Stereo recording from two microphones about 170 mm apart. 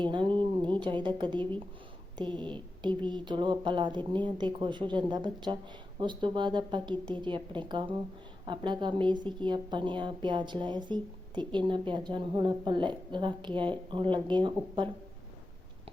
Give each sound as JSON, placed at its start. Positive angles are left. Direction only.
{"t": 0.0, "sound": "a woman's voice", "side_deg": -30}